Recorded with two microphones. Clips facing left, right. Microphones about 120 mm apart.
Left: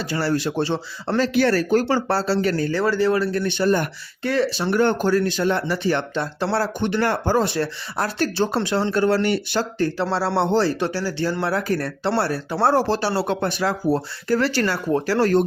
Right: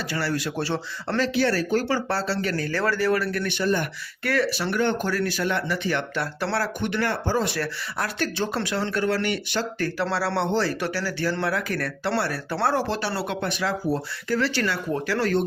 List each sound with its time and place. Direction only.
0.0 s speech: 30° left (ahead or behind)
1.3 s speech: 50° left (ahead or behind)
2.6 s speech: 20° left (ahead or behind); by 7.4 s 45° left (ahead or behind)
7.4 s speech: 30° left (ahead or behind)